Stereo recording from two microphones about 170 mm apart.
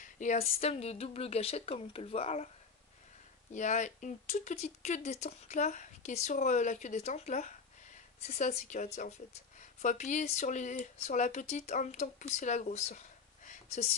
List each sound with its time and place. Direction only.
0.0 s a woman's voice: 45° left (ahead or behind)
3.5 s speech: 45° left (ahead or behind)